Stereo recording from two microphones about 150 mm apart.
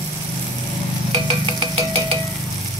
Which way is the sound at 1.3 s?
35° right (ahead or behind).